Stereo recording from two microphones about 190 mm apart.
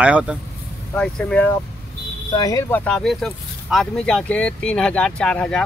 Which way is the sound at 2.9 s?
Centre (ahead or behind).